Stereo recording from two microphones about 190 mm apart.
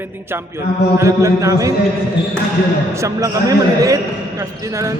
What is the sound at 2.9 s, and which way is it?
A man's voice, 15° right (ahead or behind).